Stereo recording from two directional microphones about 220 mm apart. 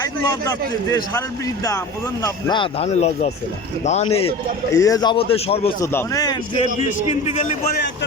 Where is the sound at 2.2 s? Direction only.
20° left (ahead or behind).